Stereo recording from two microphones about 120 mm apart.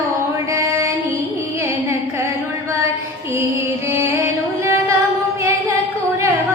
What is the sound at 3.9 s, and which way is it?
Music, 20° right (ahead or behind).